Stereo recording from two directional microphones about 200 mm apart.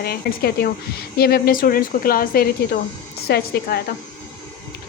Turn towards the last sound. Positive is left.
turn(degrees=55)  # may be behind; listen again after turning